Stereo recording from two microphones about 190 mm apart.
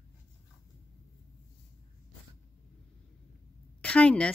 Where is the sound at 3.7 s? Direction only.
5° left (ahead or behind).